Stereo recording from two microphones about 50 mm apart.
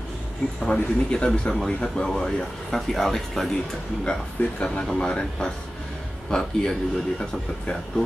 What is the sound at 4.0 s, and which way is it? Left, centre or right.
Speech, centre.